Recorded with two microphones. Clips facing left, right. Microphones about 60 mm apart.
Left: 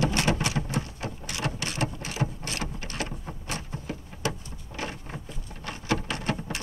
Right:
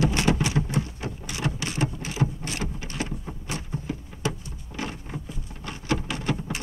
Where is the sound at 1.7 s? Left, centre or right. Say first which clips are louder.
Right 2 dB; right.